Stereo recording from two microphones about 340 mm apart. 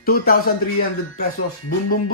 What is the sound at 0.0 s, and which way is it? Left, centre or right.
Speech, left.